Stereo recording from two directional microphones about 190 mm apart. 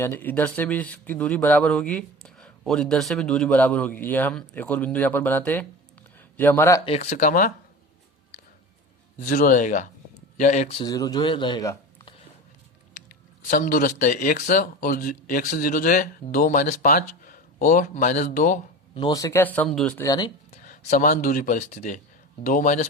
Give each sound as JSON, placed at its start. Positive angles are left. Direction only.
{"t": 0.0, "sound": "speech", "side_deg": 10}
{"t": 6.8, "sound": "speech", "side_deg": 35}
{"t": 9.1, "sound": "speech", "side_deg": 45}
{"t": 13.5, "sound": "speech", "side_deg": 45}
{"t": 18.9, "sound": "speech", "side_deg": 20}
{"t": 20.0, "sound": "speech", "side_deg": 20}
{"t": 20.5, "sound": "speech", "side_deg": 40}